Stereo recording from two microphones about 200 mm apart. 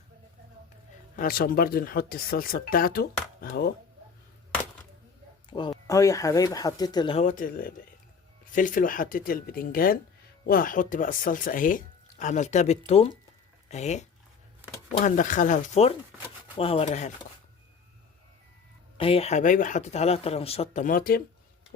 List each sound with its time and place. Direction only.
1.1 s speech: 45° left (ahead or behind)
5.5 s speech: 25° left (ahead or behind)
7.2 s speech: 40° left (ahead or behind)
18.9 s speech: 30° left (ahead or behind); by 21.2 s 45° left (ahead or behind)